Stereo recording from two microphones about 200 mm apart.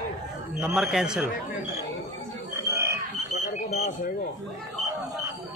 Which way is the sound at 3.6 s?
35° left (ahead or behind).